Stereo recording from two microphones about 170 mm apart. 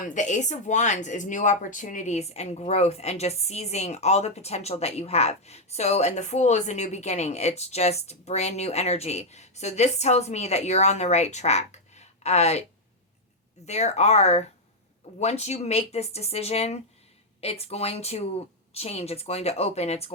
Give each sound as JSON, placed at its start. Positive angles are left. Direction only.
{"t": 0.0, "sound": "speech", "side_deg": 45}
{"t": 13.7, "sound": "speech", "side_deg": 40}